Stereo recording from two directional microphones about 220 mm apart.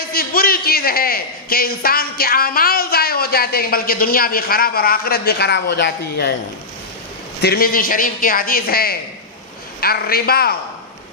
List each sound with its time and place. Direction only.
0.1 s a man's voice: 40° left (ahead or behind)
7.4 s a man's voice: 45° left (ahead or behind)